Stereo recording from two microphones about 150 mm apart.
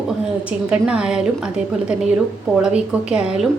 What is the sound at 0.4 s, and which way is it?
A woman's voice, 5° right (ahead or behind).